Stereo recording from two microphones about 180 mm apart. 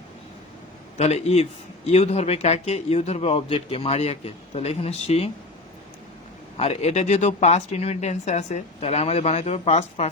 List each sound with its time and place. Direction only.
0.9 s a man's voice: 35° left (ahead or behind)
6.6 s a man's voice: 35° left (ahead or behind)